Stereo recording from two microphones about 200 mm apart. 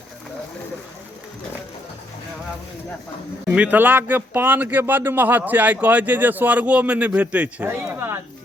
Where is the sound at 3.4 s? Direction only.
5° right (ahead or behind).